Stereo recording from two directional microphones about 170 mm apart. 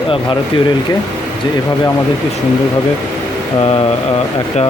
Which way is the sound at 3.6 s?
35° left (ahead or behind).